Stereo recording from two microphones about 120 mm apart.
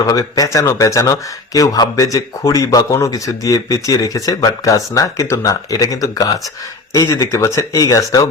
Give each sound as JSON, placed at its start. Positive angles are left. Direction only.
{"t": 0.0, "sound": "speech", "side_deg": 30}